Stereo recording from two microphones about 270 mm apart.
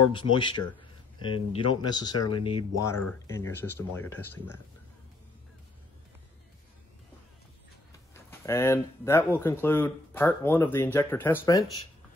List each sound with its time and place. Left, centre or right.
0.1 s speech: centre
8.1 s speech: centre